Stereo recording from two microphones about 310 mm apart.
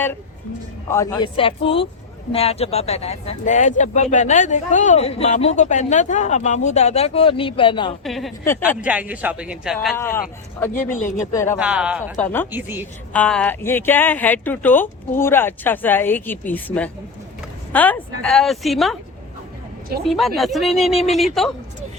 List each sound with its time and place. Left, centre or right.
0.9 s speech: centre
8.0 s speech: centre
10.0 s speech: centre
11.6 s speech: centre
12.5 s a woman's voice: centre
13.1 s speech: centre
20.1 s speech: centre